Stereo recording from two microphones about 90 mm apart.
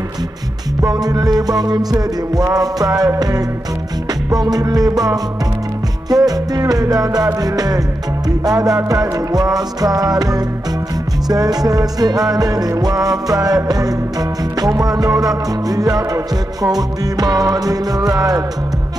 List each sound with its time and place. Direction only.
0.8 s music: 45° right (ahead or behind)